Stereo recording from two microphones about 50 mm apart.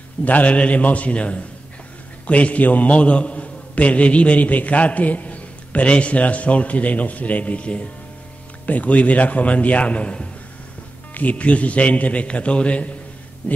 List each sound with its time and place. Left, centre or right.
0.2 s a man's voice: left